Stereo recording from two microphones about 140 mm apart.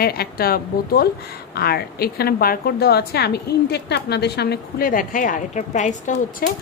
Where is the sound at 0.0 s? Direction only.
90° left.